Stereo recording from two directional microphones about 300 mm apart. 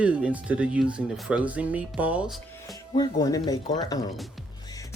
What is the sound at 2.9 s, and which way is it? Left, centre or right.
Speech, centre.